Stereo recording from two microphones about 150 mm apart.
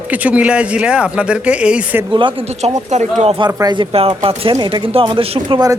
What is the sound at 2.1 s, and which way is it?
A man's voice, 35° right (ahead or behind).